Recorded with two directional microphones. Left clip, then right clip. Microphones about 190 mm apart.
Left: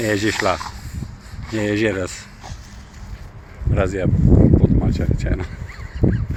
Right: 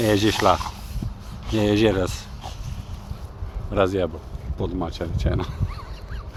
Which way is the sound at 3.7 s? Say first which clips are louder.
Even; 5° right (ahead or behind).